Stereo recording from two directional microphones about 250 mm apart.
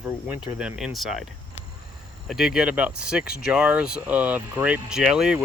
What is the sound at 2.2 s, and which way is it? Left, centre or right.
Speech, centre.